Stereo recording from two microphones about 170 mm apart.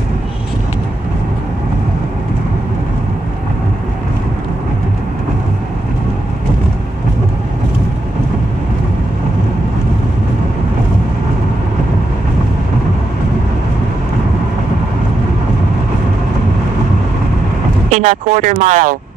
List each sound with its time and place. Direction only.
17.8 s speech: 50° right (ahead or behind)